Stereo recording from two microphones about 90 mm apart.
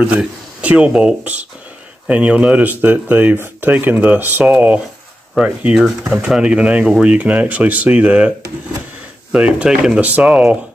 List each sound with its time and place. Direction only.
0.0 s speech: 15° right (ahead or behind)
9.6 s speech: 10° right (ahead or behind)